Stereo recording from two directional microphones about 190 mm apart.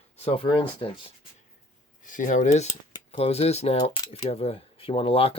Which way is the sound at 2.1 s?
45° left (ahead or behind).